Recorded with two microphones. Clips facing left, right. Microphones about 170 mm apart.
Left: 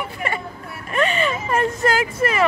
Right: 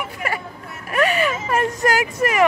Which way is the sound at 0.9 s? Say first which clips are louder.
Right 1 dB; 10° right (ahead or behind).